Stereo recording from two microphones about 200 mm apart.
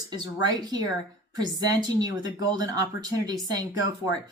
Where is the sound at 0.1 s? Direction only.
20° right (ahead or behind).